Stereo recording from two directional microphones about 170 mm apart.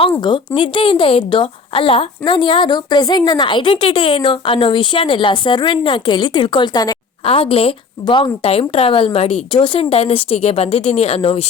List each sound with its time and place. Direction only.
0.2 s a woman's voice: 30° left (ahead or behind)